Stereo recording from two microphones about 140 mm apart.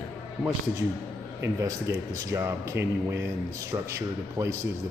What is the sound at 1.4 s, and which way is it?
A man's voice, 25° right (ahead or behind).